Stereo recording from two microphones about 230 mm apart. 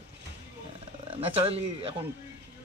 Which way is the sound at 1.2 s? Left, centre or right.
Right.